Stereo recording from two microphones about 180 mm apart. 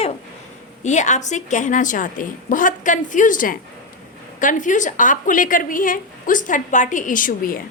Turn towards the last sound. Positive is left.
turn(degrees=50)  # may be behind; listen again after turning